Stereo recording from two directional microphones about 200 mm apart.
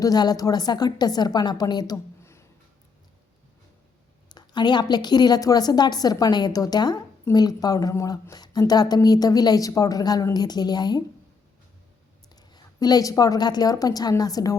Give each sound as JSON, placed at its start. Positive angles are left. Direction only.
{"t": 0.0, "sound": "a woman's voice", "side_deg": 20}
{"t": 4.3, "sound": "a woman's voice", "side_deg": 20}
{"t": 12.4, "sound": "a woman's voice", "side_deg": 20}